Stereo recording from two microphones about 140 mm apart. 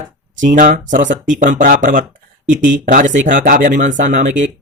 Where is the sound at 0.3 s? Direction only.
65° right (ahead or behind).